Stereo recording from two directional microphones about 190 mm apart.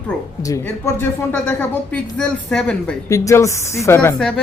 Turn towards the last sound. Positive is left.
turn(degrees=5)  # may be behind; listen again after turning